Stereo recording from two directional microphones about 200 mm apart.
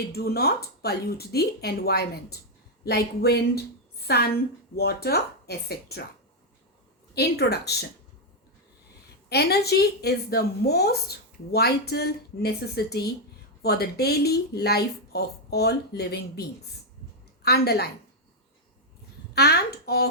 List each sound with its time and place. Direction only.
0.1 s a woman's voice: 50° left (ahead or behind)
7.1 s speech: 55° left (ahead or behind)
9.3 s a woman's voice: 55° left (ahead or behind)
17.4 s a woman's voice: 55° left (ahead or behind)
19.3 s speech: 55° left (ahead or behind)